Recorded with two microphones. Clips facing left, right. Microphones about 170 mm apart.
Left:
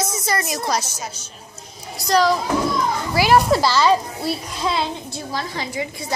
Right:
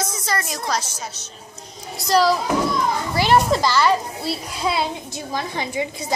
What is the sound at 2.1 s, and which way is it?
A child's voice, 5° right (ahead or behind).